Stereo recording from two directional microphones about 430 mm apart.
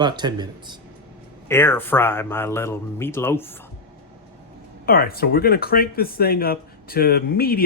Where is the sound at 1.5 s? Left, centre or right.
Centre.